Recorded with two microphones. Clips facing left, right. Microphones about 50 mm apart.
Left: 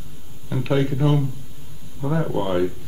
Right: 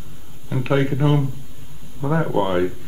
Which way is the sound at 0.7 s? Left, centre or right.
Right.